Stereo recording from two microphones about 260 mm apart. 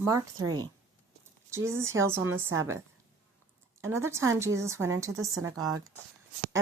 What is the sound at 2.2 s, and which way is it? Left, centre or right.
Speech, right.